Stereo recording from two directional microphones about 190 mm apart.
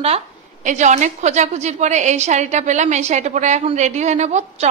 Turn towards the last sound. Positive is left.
turn(degrees=-35)  # may be behind; listen again after turning